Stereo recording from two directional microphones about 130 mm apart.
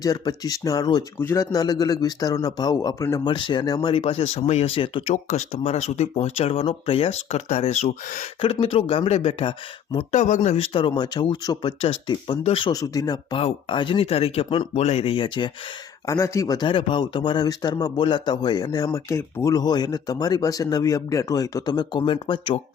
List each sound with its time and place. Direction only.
0.0 s a man's voice: 30° left (ahead or behind)
3.2 s speech: 40° left (ahead or behind)
3.9 s speech: 45° left (ahead or behind)
5.1 s speech: 60° left (ahead or behind)
8.6 s speech: 45° left (ahead or behind)
10.1 s speech: 65° left (ahead or behind); by 12.7 s 45° left (ahead or behind)
12.7 s a man's voice: 25° left (ahead or behind)
13.3 s speech: 40° left (ahead or behind)
14.7 s speech: 55° left (ahead or behind); by 15.5 s 40° left (ahead or behind)
16.0 s a man's voice: 20° left (ahead or behind)
16.6 s speech: 40° left (ahead or behind)